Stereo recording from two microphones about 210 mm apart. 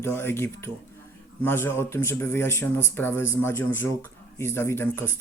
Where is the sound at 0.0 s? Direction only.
10° left (ahead or behind).